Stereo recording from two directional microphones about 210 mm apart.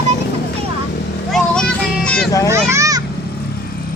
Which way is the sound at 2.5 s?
15° right (ahead or behind).